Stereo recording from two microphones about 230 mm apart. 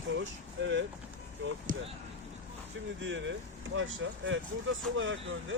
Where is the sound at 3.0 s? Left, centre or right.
Right.